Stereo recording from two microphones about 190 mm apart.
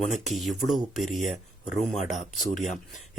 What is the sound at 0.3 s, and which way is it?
Speech, centre (ahead or behind).